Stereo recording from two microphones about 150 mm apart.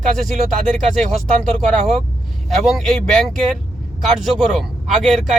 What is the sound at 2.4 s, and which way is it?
Speech, centre (ahead or behind).